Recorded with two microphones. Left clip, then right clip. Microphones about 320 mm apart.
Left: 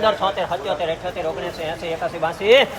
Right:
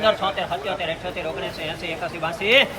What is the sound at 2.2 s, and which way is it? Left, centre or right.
Speech, left.